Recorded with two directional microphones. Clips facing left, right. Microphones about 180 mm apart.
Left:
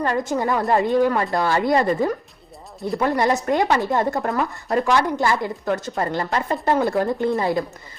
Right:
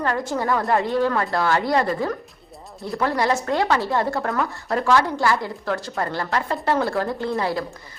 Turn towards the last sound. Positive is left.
turn(degrees=20)  # may be behind; listen again after turning